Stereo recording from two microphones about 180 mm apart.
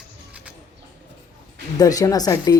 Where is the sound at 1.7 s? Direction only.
20° left (ahead or behind).